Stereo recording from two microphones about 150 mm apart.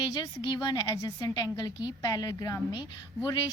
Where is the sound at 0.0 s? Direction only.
30° left (ahead or behind).